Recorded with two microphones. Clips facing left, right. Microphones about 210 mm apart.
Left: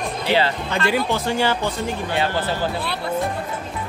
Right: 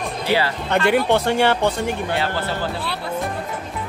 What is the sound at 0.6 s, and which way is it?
Speech, 60° right (ahead or behind).